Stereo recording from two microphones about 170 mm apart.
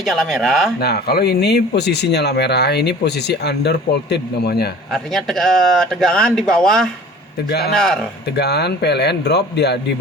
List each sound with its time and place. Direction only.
0.0 s speech: centre (ahead or behind)
0.8 s speech: 65° left (ahead or behind)
4.9 s speech: centre (ahead or behind)
8.4 s speech: 75° left (ahead or behind)